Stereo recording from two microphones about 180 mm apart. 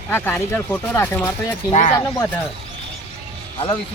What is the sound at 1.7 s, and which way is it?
Speech, 40° left (ahead or behind).